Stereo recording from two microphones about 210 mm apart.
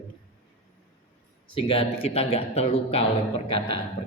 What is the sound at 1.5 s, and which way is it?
A man's voice, 25° left (ahead or behind).